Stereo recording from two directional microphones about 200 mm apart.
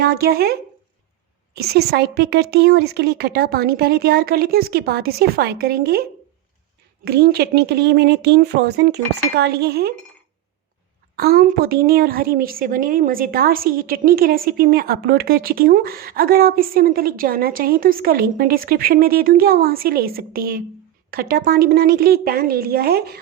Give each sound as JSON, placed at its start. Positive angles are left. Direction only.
{"t": 0.0, "sound": "a woman's voice", "side_deg": -50}
{"t": 1.5, "sound": "a woman's voice", "side_deg": -50}
{"t": 11.2, "sound": "a woman's voice", "side_deg": -50}